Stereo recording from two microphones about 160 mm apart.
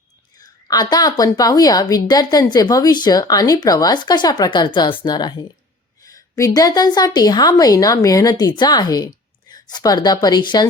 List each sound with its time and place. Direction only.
0.3 s a woman's voice: 25° left (ahead or behind)